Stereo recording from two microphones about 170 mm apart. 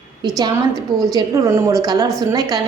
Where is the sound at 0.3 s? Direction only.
20° right (ahead or behind).